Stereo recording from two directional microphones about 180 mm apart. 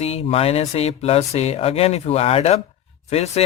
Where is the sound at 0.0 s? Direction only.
35° left (ahead or behind).